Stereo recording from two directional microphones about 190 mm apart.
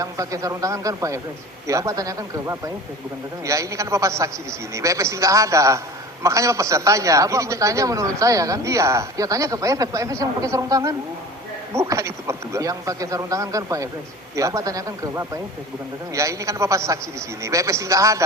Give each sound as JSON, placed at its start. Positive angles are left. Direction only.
{"t": 0.0, "sound": "a man's voice", "side_deg": -15}